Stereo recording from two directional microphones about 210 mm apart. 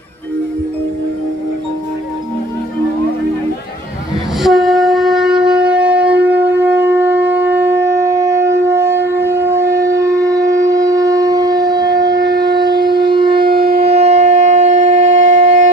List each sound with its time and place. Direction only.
4.4 s shofar: centre (ahead or behind); by 13.5 s 25° right (ahead or behind)
13.5 s shofar: 45° right (ahead or behind)
13.7 s wind instrument: 30° right (ahead or behind)